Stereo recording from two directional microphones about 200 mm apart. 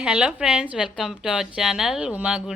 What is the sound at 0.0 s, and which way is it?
A woman's voice, 5° right (ahead or behind).